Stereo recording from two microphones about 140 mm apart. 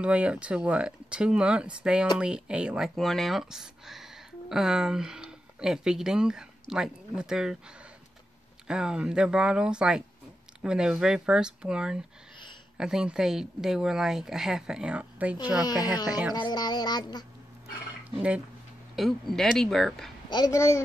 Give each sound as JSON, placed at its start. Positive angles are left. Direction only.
{"t": 0.0, "sound": "speech", "side_deg": -10}
{"t": 8.6, "sound": "speech", "side_deg": -5}
{"t": 15.6, "sound": "speech", "side_deg": 30}
{"t": 18.9, "sound": "speech", "side_deg": 0}
{"t": 20.2, "sound": "speech", "side_deg": 30}
{"t": 20.5, "sound": "speech", "side_deg": 20}